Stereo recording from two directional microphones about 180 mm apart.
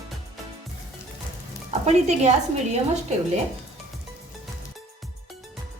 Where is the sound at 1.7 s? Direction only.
40° right (ahead or behind).